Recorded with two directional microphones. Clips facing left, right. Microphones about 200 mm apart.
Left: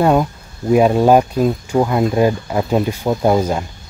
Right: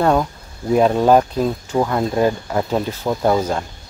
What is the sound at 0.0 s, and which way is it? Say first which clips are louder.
Speech: left 2 dB; 10° left (ahead or behind).